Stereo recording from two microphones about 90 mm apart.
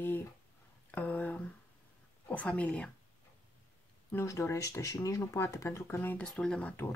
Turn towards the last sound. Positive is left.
turn(degrees=10)  # may be behind; listen again after turning